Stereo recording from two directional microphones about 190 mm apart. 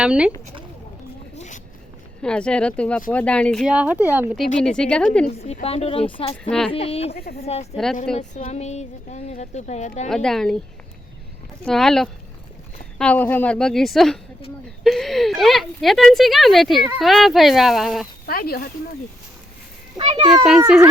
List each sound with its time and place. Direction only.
0.0 s a woman's voice: 5° right (ahead or behind)
1.4 s zipper: 40° left (ahead or behind)
2.2 s a woman's voice: 5° left (ahead or behind)
4.8 s a woman's voice: 5° left (ahead or behind)
5.5 s speech: 35° left (ahead or behind)
6.5 s a woman's voice: 5° left (ahead or behind)
6.7 s speech: 30° left (ahead or behind)
10.1 s a woman's voice: centre (ahead or behind)
11.6 s a woman's voice: centre (ahead or behind)
18.3 s speech: 55° left (ahead or behind)
20.3 s a woman's voice: centre (ahead or behind)